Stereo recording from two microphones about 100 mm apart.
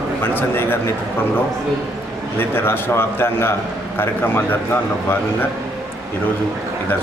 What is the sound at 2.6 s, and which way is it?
A man's voice, 20° left (ahead or behind).